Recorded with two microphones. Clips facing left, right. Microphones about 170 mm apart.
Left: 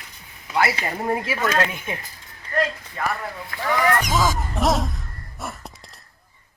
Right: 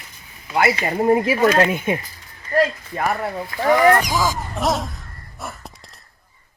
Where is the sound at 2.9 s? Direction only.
40° right (ahead or behind).